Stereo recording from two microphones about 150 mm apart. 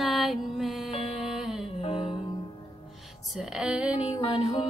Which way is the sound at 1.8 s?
40° left (ahead or behind).